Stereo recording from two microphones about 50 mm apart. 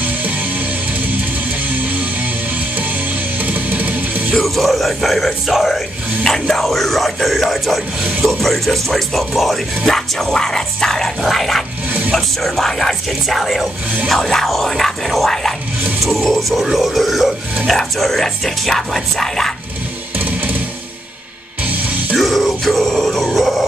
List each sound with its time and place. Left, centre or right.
1.7 s music: right
3.4 s music: right
4.3 s speech: centre
20.2 s music: right
22.1 s a sound: centre